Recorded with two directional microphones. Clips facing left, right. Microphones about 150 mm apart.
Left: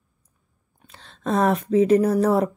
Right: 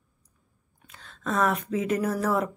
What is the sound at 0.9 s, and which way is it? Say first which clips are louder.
Speech: left 6 dB; 30° left (ahead or behind).